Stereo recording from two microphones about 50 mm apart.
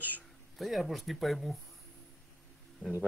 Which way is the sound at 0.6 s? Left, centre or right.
Centre.